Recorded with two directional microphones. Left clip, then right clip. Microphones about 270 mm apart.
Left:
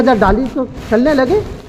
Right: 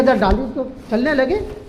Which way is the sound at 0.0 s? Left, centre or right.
Left.